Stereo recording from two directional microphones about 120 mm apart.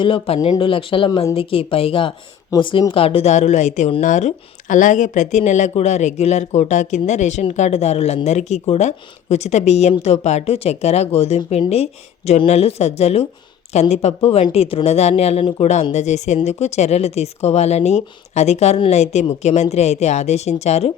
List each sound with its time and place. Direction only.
0.0 s speech: 45° left (ahead or behind); by 20.9 s 65° left (ahead or behind)